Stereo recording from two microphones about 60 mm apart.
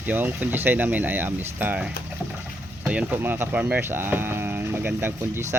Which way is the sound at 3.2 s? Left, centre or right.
Right.